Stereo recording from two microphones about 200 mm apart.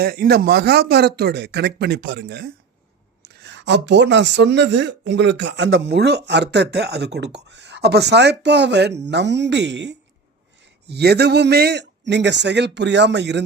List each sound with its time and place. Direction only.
0.0 s speech: 50° right (ahead or behind)